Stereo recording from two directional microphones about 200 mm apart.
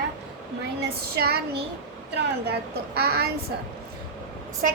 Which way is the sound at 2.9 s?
50° right (ahead or behind).